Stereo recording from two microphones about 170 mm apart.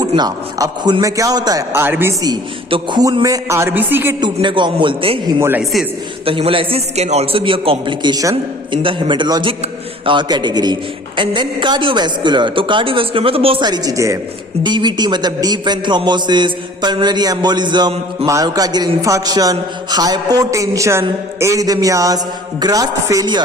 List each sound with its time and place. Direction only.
0.2 s a man's voice: 25° right (ahead or behind)
4.2 s a man's voice: 30° right (ahead or behind)
5.4 s a man's voice: 10° right (ahead or behind)
6.2 s a man's voice: 30° right (ahead or behind)